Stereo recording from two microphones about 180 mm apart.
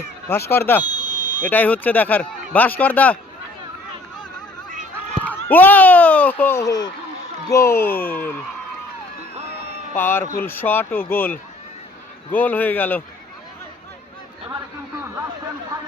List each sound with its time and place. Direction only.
0.3 s speech: 15° left (ahead or behind)
0.9 s a sound: 25° left (ahead or behind)
1.4 s speech: 10° left (ahead or behind)
5.2 s speech: 10° left (ahead or behind)
9.9 s speech: 10° left (ahead or behind)